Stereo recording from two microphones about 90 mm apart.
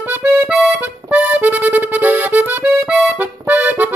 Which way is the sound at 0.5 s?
10° right (ahead or behind).